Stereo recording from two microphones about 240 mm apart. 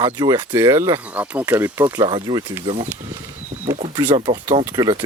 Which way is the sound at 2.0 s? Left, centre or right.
Centre.